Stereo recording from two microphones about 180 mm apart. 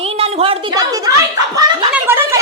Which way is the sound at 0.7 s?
20° right (ahead or behind).